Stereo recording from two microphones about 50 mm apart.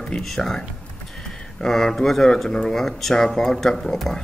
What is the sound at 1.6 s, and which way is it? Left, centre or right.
Speech, centre.